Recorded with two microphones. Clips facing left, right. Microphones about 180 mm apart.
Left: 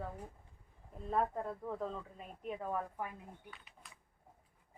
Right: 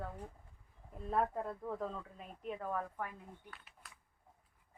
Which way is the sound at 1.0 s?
Centre (ahead or behind).